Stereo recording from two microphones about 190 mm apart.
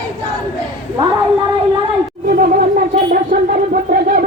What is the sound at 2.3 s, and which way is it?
Music, 45° right (ahead or behind).